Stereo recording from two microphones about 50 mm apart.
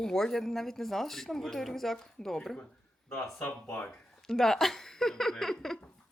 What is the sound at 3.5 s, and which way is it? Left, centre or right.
Speech, left.